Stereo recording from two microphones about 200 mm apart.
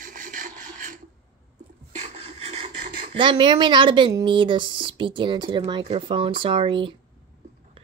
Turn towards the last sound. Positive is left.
turn(degrees=-25)  # may be behind; listen again after turning